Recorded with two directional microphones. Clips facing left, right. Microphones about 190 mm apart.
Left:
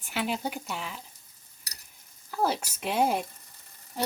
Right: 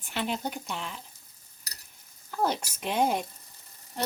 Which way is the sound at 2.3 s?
5° left (ahead or behind).